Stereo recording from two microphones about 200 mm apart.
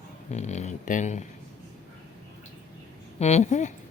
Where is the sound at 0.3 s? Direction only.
35° left (ahead or behind).